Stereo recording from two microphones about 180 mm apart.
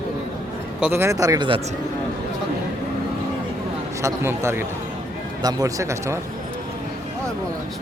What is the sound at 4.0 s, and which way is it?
Speech, 15° right (ahead or behind).